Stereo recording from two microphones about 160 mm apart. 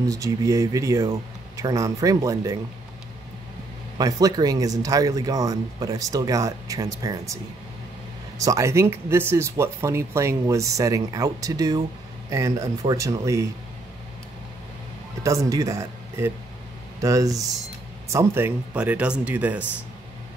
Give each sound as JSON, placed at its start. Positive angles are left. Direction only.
{"t": 0.0, "sound": "speech", "side_deg": -20}
{"t": 4.0, "sound": "speech", "side_deg": -25}
{"t": 8.4, "sound": "speech", "side_deg": -20}
{"t": 15.2, "sound": "speech", "side_deg": -20}